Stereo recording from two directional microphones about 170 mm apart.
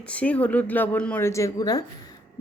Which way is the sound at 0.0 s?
5° left (ahead or behind).